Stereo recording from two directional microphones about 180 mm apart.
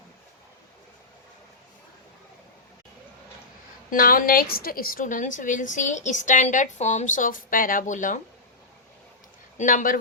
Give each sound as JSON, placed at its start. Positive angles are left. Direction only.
{"t": 3.8, "sound": "a woman's voice", "side_deg": 50}
{"t": 9.6, "sound": "a woman's voice", "side_deg": 45}